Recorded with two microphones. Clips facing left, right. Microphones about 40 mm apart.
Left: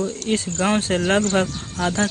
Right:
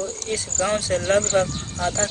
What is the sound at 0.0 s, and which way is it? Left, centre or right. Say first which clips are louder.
Speech: left 5 dB; left.